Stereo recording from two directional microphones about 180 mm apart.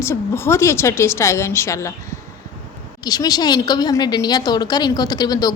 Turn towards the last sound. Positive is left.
turn(degrees=20)  # may be behind; listen again after turning